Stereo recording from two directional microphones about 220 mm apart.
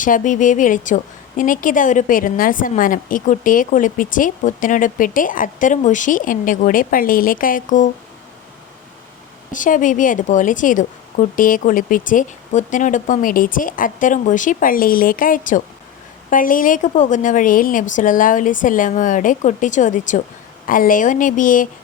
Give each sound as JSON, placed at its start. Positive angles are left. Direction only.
{"t": 0.0, "sound": "a woman's voice", "side_deg": 35}
{"t": 9.5, "sound": "a woman's voice", "side_deg": 35}